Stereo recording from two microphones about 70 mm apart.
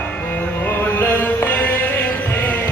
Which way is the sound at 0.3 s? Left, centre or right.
Left.